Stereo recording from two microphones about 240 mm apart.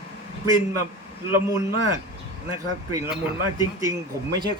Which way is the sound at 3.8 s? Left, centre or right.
Centre.